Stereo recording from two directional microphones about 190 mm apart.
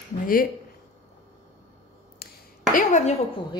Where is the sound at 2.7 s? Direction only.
40° left (ahead or behind).